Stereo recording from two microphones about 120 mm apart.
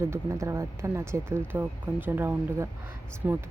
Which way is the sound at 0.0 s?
20° right (ahead or behind).